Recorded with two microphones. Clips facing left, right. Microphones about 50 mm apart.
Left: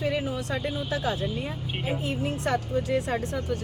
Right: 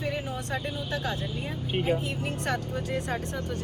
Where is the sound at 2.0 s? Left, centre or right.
Right.